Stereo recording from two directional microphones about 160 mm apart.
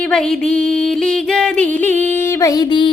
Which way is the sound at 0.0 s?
5° left (ahead or behind).